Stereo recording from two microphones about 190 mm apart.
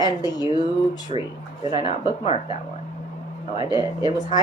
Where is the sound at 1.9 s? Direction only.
30° left (ahead or behind).